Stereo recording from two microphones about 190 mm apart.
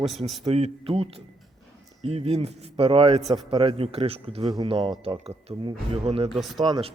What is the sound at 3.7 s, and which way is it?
Speech, 30° right (ahead or behind).